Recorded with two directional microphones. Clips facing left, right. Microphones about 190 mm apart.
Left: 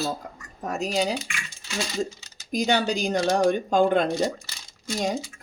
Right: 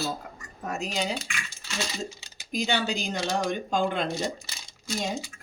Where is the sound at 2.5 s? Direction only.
45° left (ahead or behind).